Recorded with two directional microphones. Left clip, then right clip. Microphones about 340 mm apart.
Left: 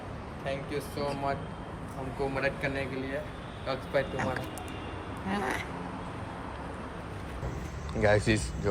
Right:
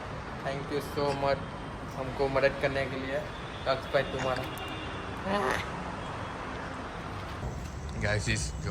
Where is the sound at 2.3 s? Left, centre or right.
Centre.